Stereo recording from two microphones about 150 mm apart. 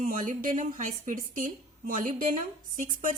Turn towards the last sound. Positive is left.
turn(degrees=-65)  # may be behind; listen again after turning